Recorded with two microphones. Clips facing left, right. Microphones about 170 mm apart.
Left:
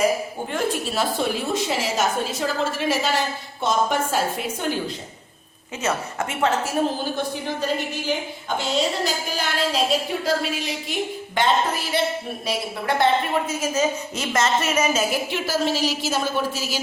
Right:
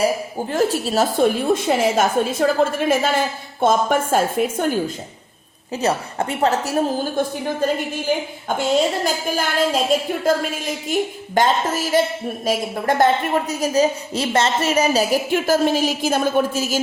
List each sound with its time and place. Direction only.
0.5 s a woman's voice: 35° right (ahead or behind)
5.7 s a woman's voice: 35° right (ahead or behind)